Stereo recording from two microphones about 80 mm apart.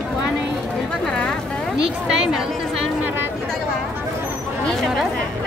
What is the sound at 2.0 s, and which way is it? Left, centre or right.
Chatter, centre.